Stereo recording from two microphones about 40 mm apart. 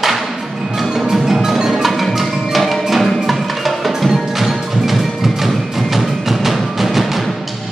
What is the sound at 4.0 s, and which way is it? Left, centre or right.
Tubular bells, centre.